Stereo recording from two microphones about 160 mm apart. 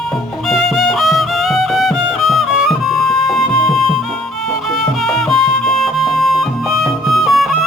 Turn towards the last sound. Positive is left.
turn(degrees=0)  # may be behind; listen again after turning